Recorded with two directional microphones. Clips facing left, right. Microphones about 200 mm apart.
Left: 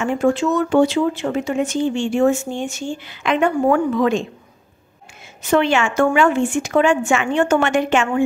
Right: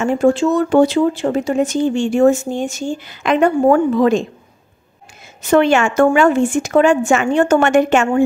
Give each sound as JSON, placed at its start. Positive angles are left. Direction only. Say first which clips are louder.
{"t": 0.0, "sound": "speech", "louder": "right 4 dB", "side_deg": -35}
{"t": 5.4, "sound": "speech", "louder": "right 4 dB", "side_deg": -45}